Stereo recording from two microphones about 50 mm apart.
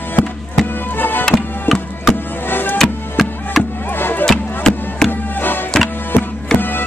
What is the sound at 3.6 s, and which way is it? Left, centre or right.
Music, left.